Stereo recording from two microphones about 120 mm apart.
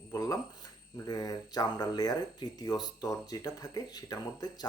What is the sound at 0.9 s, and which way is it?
Speech, 30° left (ahead or behind).